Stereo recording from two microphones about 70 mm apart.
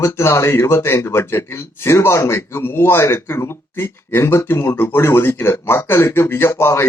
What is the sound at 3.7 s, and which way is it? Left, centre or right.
Speech, left.